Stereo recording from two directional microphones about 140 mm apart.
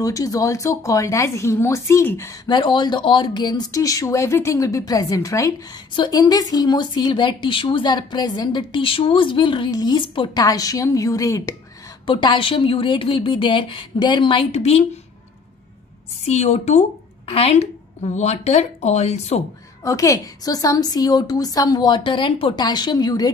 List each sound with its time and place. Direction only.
0.0 s a woman's voice: 25° left (ahead or behind)
2.4 s a woman's voice: 35° left (ahead or behind)
12.1 s speech: 35° left (ahead or behind)
16.3 s a woman's voice: 55° left (ahead or behind)
19.8 s a woman's voice: 25° left (ahead or behind)